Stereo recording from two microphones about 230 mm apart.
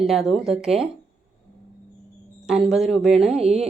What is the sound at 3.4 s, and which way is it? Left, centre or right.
Speech, right.